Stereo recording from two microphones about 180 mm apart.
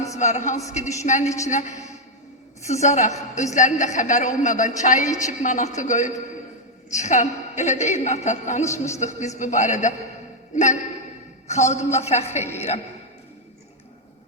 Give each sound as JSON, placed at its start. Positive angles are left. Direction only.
{"t": 0.2, "sound": "a woman's voice", "side_deg": 40}
{"t": 2.8, "sound": "a man's voice", "side_deg": 40}
{"t": 8.6, "sound": "a woman's voice", "side_deg": 15}
{"t": 9.0, "sound": "a woman's voice", "side_deg": 40}